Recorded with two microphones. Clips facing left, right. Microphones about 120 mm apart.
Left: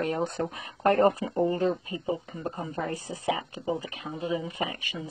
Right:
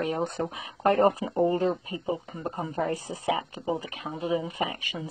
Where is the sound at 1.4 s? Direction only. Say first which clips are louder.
Right 2 dB; 30° right (ahead or behind).